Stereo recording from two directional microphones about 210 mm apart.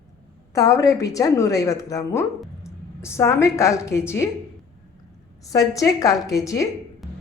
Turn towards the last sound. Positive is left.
turn(degrees=15)  # may be behind; listen again after turning